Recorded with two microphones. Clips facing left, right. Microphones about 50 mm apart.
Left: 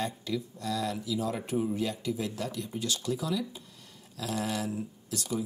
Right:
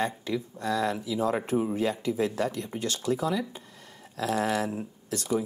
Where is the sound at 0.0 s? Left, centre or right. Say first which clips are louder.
Right 4 dB; right.